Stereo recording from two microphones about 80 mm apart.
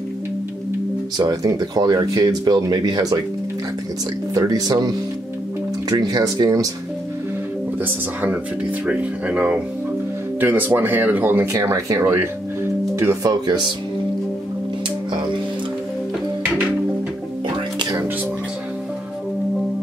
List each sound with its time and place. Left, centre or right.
1.1 s speech: right
4.3 s speech: right
7.8 s speech: right
11.5 s speech: right
12.9 s music: right
13.2 s speech: right